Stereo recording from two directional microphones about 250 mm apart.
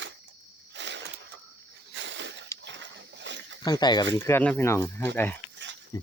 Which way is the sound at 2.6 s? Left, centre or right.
Right.